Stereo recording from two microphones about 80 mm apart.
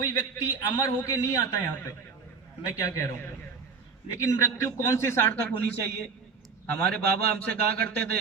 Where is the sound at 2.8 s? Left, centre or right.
Left.